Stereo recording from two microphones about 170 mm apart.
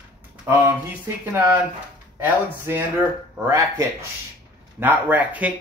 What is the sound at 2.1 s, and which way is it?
Speech, 15° right (ahead or behind).